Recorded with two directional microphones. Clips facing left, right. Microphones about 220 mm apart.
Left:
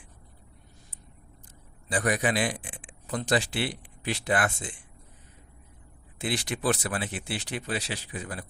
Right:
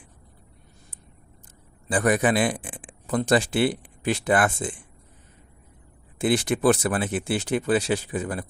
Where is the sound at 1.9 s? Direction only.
50° right (ahead or behind).